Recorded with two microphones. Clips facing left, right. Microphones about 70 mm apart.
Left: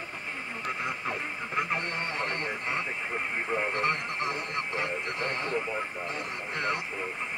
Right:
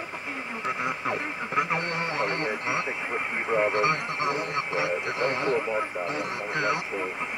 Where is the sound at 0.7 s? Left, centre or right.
Centre.